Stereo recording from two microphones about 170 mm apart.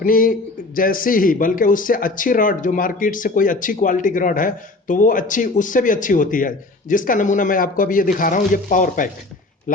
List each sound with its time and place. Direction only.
0.0 s a man's voice: 55° left (ahead or behind)